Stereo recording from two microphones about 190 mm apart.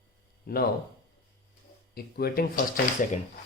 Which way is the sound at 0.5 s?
55° left (ahead or behind).